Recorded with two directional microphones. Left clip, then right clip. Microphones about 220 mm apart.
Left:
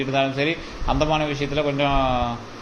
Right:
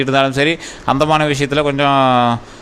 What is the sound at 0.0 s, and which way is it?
A man's voice, 50° right (ahead or behind).